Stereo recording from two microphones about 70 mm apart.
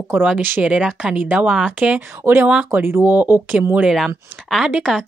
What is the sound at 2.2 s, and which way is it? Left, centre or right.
Speech, right.